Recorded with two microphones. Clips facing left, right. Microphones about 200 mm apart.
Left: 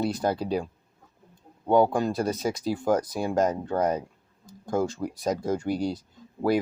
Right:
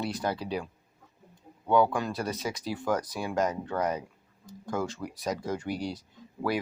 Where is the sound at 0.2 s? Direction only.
45° left (ahead or behind).